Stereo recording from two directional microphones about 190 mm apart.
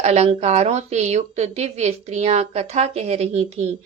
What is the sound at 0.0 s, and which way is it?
A woman's voice, 35° right (ahead or behind).